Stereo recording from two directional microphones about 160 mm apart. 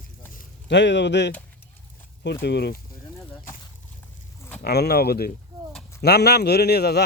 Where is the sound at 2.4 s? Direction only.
90° left.